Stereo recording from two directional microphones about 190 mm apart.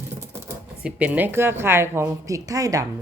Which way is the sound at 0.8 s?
5° right (ahead or behind).